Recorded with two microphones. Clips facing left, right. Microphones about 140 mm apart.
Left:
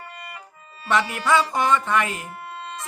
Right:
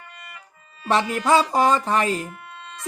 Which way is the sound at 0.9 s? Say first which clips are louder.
Right 2 dB; 35° right (ahead or behind).